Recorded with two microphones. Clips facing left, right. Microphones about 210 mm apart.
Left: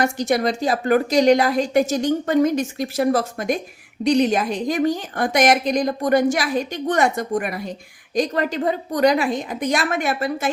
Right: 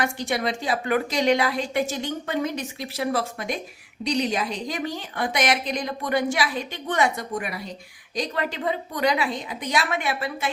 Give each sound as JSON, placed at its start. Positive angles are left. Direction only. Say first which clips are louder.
{"t": 0.0, "sound": "a woman's voice", "louder": "left 6 dB", "side_deg": 40}